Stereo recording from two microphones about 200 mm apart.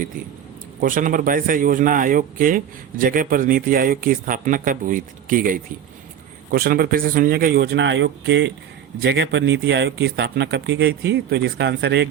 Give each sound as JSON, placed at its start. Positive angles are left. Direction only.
{"t": 0.8, "sound": "a man's voice", "side_deg": -40}